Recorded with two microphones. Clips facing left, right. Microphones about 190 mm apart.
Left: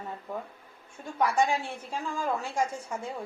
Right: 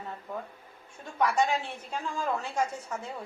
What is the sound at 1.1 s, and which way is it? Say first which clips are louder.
A woman's voice: left 1 dB; 10° left (ahead or behind).